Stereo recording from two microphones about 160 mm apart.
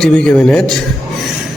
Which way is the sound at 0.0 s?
5° left (ahead or behind).